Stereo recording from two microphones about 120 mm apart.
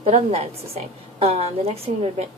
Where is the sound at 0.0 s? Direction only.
60° right (ahead or behind).